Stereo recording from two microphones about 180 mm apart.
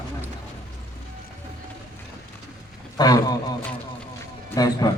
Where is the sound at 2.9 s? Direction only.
20° left (ahead or behind).